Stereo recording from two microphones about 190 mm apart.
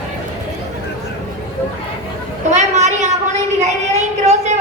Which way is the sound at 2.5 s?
40° right (ahead or behind).